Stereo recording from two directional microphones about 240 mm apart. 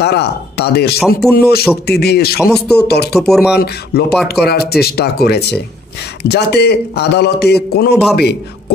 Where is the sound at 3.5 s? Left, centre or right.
Left.